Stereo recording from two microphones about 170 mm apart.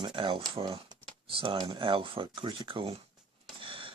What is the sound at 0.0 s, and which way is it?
Speech, 30° right (ahead or behind).